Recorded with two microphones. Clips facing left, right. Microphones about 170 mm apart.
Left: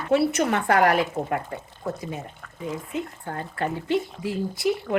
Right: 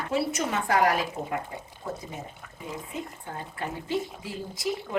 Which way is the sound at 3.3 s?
70° left (ahead or behind).